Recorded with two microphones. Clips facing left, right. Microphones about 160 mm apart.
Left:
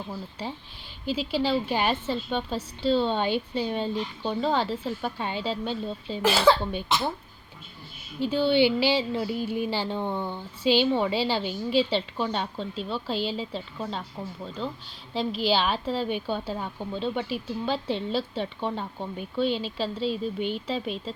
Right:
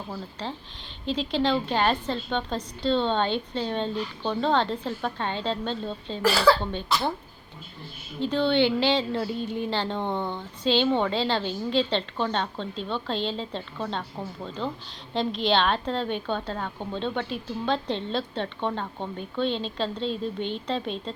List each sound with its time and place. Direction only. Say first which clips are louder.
0.4 s a woman's voice: right 1 dB; 10° left (ahead or behind)
6.2 s speech: even; 20° left (ahead or behind)
8.2 s a woman's voice: left 1 dB; 5° left (ahead or behind)
15.1 s a woman's voice: right 1 dB; 5° left (ahead or behind)